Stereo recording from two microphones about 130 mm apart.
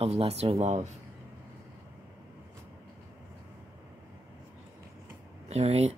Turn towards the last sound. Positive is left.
turn(degrees=-55)  # may be behind; listen again after turning